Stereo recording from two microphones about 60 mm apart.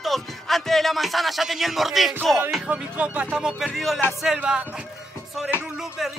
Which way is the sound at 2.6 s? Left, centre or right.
Centre.